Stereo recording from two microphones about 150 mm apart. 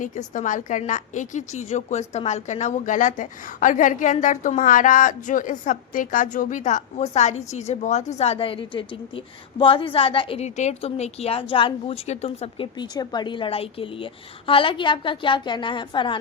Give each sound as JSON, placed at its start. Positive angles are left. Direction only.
{"t": 0.0, "sound": "a woman's voice", "side_deg": 55}
{"t": 12.7, "sound": "a woman's voice", "side_deg": 30}